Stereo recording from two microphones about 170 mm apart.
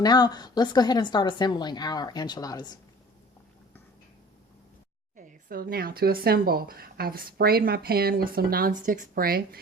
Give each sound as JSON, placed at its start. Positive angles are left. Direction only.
{"t": 0.0, "sound": "a woman's voice", "side_deg": 25}
{"t": 5.1, "sound": "speech", "side_deg": -55}